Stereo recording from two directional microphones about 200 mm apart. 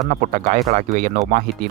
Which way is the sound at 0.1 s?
40° right (ahead or behind).